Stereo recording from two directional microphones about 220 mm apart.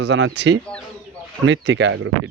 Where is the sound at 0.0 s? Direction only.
55° right (ahead or behind).